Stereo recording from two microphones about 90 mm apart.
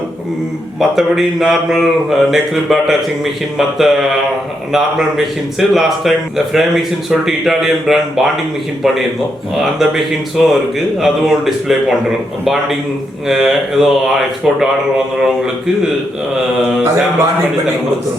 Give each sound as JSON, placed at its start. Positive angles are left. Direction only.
{"t": 0.8, "sound": "speech", "side_deg": -5}
{"t": 9.7, "sound": "speech", "side_deg": -5}
{"t": 13.2, "sound": "speech", "side_deg": -5}